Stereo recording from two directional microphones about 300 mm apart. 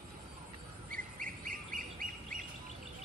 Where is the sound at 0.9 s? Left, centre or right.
Right.